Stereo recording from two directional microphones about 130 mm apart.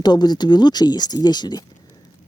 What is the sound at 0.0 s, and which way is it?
Speech, 35° left (ahead or behind).